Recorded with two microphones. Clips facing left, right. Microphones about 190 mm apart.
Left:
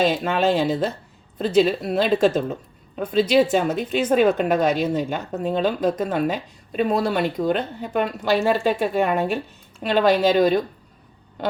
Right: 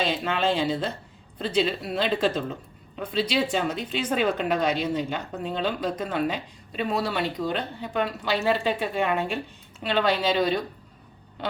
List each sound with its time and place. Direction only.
0.0 s a woman's voice: 50° left (ahead or behind)